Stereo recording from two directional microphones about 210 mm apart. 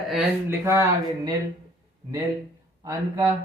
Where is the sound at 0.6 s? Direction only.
15° right (ahead or behind).